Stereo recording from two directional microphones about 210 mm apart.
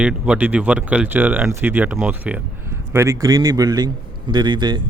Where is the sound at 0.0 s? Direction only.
5° right (ahead or behind).